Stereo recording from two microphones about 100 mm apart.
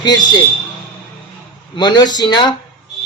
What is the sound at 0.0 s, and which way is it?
Speech, 45° left (ahead or behind).